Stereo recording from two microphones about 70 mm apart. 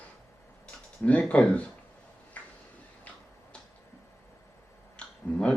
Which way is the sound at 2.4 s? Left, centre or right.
Left.